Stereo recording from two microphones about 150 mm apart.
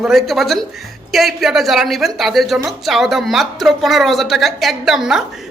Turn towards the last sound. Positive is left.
turn(degrees=-5)  # may be behind; listen again after turning